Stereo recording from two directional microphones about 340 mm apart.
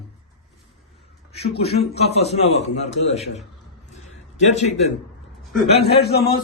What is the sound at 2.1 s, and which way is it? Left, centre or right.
Speech, centre.